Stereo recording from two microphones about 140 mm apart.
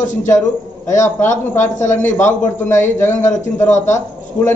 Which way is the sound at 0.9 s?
20° left (ahead or behind).